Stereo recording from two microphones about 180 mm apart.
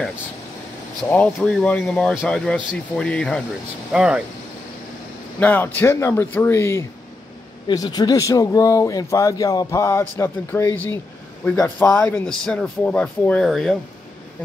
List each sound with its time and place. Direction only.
1.0 s speech: 10° left (ahead or behind)
5.4 s a man's voice: 10° left (ahead or behind)